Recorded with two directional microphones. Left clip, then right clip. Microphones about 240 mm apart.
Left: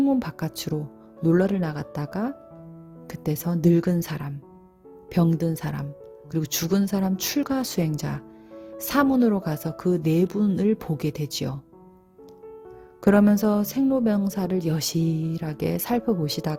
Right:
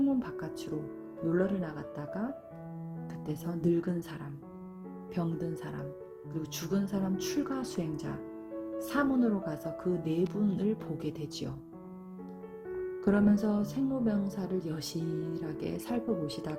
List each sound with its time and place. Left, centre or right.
0.0 s speech: left
13.1 s speech: left